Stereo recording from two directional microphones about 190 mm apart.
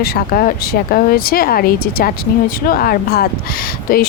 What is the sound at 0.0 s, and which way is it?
Speech, 50° left (ahead or behind).